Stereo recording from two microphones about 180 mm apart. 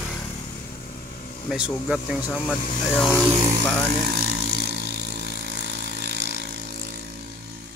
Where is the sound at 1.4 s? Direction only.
5° right (ahead or behind).